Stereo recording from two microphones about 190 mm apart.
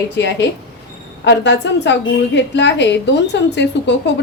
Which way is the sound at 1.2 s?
65° left (ahead or behind).